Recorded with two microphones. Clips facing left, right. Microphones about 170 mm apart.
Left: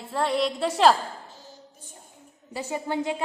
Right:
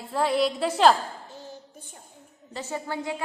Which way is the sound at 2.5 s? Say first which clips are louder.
Left 3 dB; 15° left (ahead or behind).